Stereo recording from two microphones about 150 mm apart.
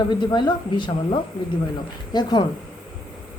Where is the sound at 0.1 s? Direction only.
30° left (ahead or behind).